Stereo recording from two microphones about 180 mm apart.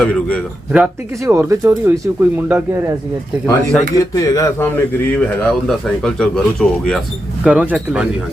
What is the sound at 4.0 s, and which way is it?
A man's voice, 20° left (ahead or behind).